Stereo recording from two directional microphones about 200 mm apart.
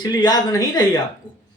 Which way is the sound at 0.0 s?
20° left (ahead or behind).